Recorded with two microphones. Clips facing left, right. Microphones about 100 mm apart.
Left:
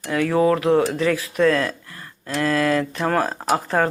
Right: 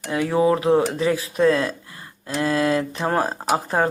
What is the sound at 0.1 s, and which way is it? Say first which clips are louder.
Speech: left 1 dB; 20° right (ahead or behind).